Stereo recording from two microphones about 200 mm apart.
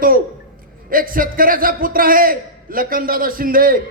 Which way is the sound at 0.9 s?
45° right (ahead or behind).